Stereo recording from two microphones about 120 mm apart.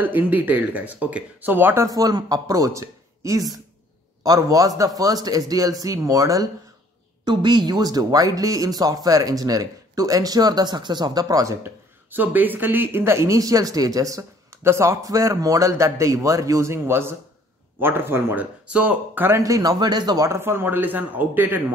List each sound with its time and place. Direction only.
0.0 s speech: 15° right (ahead or behind)
1.9 s a man's voice: 30° right (ahead or behind)
20.2 s speech: 20° right (ahead or behind)